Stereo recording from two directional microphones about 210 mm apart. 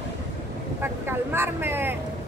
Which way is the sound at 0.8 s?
10° right (ahead or behind).